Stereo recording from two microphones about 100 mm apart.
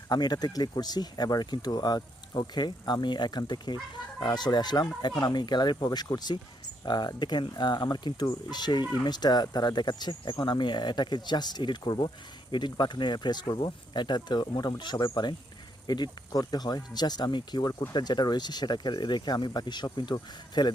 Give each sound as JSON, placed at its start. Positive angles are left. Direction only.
{"t": 0.1, "sound": "speech", "side_deg": 45}